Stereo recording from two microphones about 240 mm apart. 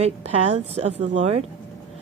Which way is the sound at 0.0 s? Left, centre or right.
Right.